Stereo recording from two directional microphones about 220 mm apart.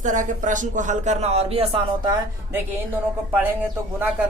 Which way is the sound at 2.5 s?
10° right (ahead or behind).